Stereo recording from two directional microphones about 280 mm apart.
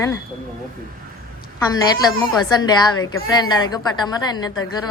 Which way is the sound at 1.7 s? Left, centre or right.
Centre.